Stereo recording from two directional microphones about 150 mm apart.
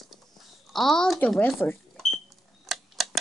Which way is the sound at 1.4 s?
10° left (ahead or behind).